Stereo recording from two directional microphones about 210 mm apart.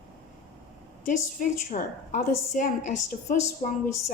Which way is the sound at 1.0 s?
35° left (ahead or behind).